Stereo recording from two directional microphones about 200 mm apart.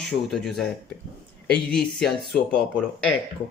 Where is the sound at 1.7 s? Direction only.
Centre (ahead or behind).